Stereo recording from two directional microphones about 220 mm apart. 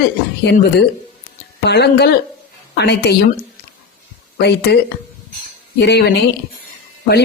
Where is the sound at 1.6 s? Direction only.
50° left (ahead or behind).